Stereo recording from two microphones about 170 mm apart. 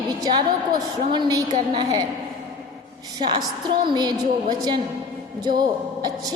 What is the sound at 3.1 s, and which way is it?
A woman's voice, 25° right (ahead or behind).